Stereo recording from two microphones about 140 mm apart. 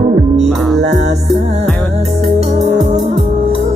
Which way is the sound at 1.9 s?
50° right (ahead or behind).